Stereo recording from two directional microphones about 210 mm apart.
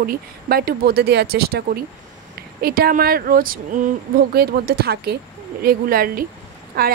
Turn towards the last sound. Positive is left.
turn(degrees=-45)  # may be behind; listen again after turning